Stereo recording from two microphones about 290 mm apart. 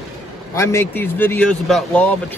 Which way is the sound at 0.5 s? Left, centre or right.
Centre.